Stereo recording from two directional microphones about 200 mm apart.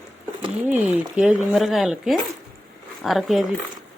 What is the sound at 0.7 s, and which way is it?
Speech, 10° right (ahead or behind).